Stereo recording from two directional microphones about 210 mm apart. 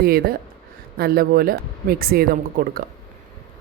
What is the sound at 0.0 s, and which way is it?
Speech, 45° right (ahead or behind).